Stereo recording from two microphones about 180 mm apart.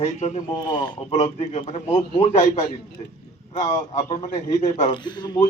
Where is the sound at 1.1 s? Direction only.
40° left (ahead or behind).